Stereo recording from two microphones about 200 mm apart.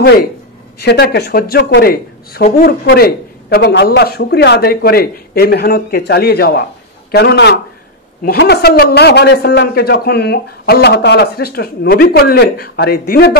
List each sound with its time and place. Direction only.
0.7 s speech: 55° left (ahead or behind)